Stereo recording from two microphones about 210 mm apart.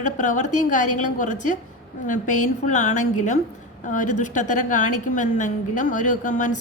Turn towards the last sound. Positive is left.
turn(degrees=35)  # may be behind; listen again after turning